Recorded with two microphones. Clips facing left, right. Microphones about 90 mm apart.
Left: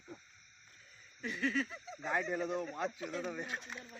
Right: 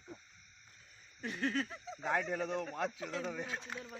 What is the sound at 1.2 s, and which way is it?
Speech, 45° right (ahead or behind).